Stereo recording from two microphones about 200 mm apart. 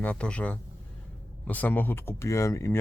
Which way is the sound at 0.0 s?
5° left (ahead or behind).